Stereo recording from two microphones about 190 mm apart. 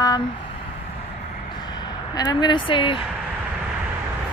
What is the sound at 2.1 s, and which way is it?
Speech, 25° left (ahead or behind).